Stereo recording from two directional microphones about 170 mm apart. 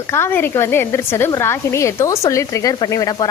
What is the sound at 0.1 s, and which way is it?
A woman's voice, 15° left (ahead or behind).